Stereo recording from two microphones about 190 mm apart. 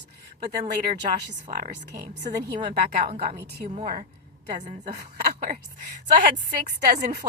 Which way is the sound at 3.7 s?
45° right (ahead or behind).